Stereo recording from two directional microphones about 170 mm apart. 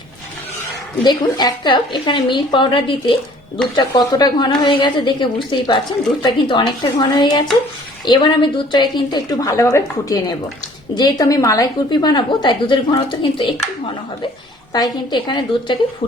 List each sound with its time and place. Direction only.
1.0 s a woman's voice: 25° left (ahead or behind)